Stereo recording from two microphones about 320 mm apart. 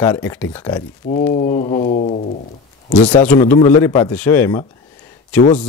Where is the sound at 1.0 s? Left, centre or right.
Left.